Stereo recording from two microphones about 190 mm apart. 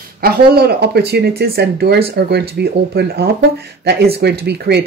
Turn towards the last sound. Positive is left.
turn(degrees=-60)  # may be behind; listen again after turning